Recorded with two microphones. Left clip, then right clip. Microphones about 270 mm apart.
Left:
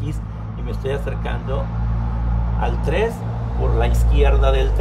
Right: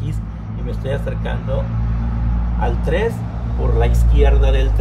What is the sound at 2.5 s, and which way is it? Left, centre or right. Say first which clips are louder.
Speech: right 1 dB; centre.